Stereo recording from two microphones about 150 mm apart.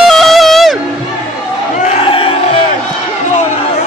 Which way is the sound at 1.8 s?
45° left (ahead or behind).